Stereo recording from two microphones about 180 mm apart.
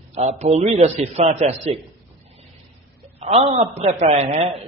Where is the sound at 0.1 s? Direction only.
40° right (ahead or behind).